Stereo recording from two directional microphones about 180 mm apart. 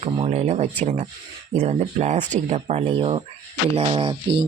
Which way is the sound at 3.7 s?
30° right (ahead or behind).